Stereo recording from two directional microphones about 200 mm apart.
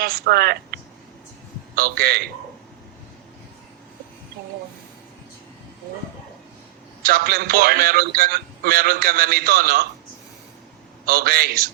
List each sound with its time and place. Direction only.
0.0 s a man's voice: 50° right (ahead or behind)
7.0 s a man's voice: 50° right (ahead or behind)
11.0 s a man's voice: 50° right (ahead or behind)